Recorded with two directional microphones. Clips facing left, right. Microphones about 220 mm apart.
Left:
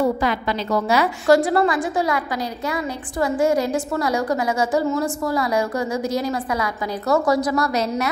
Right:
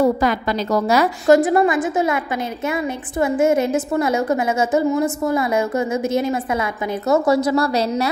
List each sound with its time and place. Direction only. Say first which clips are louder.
0.0 s a woman's voice: right 3 dB; 45° right (ahead or behind)
1.2 s a woman's voice: right 3 dB; 20° right (ahead or behind)